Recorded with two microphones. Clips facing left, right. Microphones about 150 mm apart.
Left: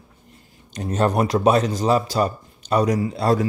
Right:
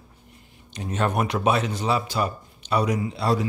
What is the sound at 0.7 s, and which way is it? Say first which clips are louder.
Speech: left 5 dB; 40° left (ahead or behind).